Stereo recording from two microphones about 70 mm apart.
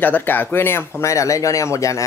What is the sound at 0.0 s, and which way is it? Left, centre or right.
Speech, left.